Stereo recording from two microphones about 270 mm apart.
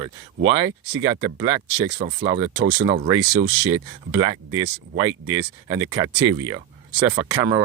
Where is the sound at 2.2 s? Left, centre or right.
Centre.